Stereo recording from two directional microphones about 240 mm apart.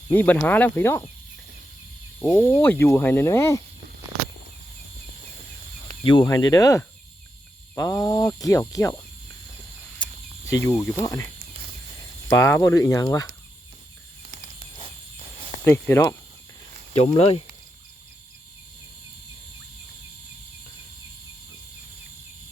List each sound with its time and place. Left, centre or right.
0.1 s speech: centre
2.1 s speech: centre
6.1 s speech: centre
10.0 s cricket: centre
10.8 s speech: centre
11.0 s speech: centre
12.3 s speech: centre
14.3 s a sound: right
15.6 s speech: centre
16.9 s speech: left